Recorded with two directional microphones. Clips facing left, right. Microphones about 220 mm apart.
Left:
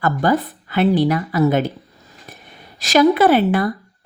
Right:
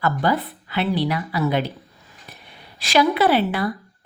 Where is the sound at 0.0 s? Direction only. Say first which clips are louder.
Left 4 dB; 45° left (ahead or behind).